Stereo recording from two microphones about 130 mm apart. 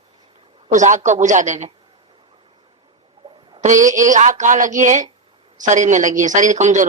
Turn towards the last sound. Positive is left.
turn(degrees=-65)  # may be behind; listen again after turning